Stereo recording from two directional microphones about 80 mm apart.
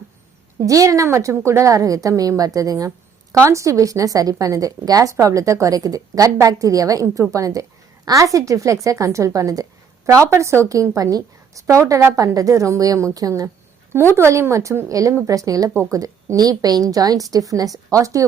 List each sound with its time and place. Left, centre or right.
0.6 s a woman's voice: right
14.2 s a woman's voice: right